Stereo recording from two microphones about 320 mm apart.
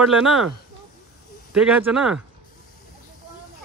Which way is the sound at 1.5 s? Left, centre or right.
Centre.